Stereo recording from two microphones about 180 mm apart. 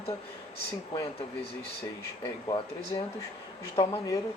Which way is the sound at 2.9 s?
25° left (ahead or behind).